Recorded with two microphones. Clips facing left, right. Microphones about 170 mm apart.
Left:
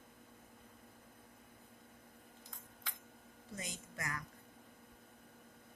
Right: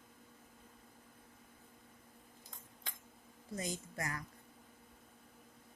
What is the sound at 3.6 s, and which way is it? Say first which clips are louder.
Speech: right 6 dB; 35° right (ahead or behind).